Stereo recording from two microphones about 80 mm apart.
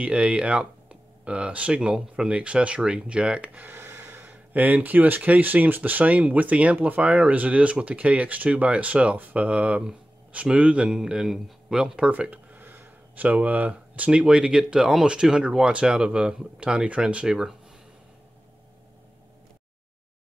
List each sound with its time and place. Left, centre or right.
0.0 s speech: centre